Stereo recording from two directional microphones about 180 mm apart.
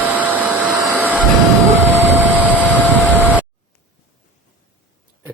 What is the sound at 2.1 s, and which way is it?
Vehicle, 10° right (ahead or behind).